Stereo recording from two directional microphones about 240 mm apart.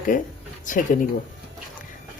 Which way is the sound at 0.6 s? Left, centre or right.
Left.